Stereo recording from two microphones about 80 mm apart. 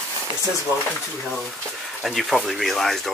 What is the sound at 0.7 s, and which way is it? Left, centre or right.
Speech, right.